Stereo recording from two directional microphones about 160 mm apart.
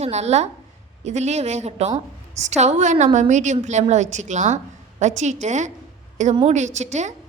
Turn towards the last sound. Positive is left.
turn(degrees=-45)  # may be behind; listen again after turning